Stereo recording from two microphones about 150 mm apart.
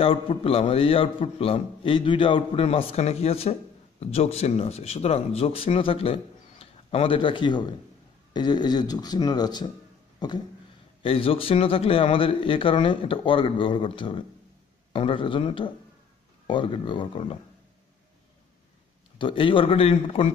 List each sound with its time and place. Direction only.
0.0 s speech: 40° left (ahead or behind)
10.1 s a sound: 30° left (ahead or behind)
11.0 s speech: 40° left (ahead or behind)
19.1 s speech: 35° left (ahead or behind)